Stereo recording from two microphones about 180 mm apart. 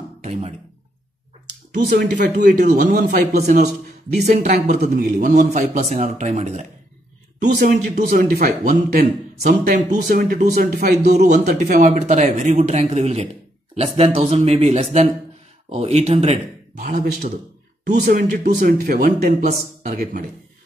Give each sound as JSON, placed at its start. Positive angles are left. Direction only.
{"t": 0.2, "sound": "a sound", "side_deg": -35}
{"t": 1.7, "sound": "speech", "side_deg": -65}
{"t": 2.4, "sound": "a man's voice", "side_deg": -45}
{"t": 4.2, "sound": "a man's voice", "side_deg": -40}
{"t": 7.4, "sound": "a man's voice", "side_deg": -55}
{"t": 10.0, "sound": "a man's voice", "side_deg": -55}
{"t": 16.8, "sound": "a man's voice", "side_deg": -50}